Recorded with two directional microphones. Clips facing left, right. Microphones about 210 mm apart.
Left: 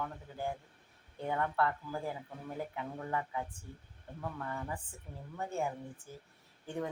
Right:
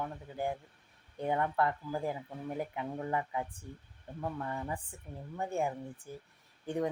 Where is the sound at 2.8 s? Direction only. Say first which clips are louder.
Right 2 dB; 20° right (ahead or behind).